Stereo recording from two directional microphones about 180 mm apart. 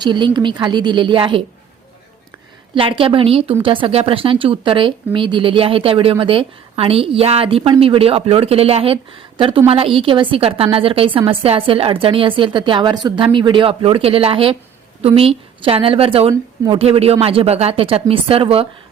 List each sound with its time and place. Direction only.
0.0 s a woman's voice: 25° right (ahead or behind)
2.7 s a woman's voice: 30° right (ahead or behind)